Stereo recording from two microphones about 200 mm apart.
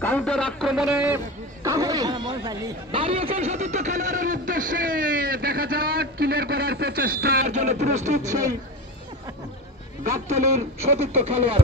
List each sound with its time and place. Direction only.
0.0 s a sound: 5° left (ahead or behind); by 7.4 s 50° right (ahead or behind)
7.6 s speech: 35° right (ahead or behind)
10.0 s speech: 35° right (ahead or behind)